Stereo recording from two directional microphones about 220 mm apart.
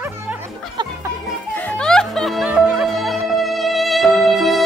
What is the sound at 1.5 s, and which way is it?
Music, 5° left (ahead or behind).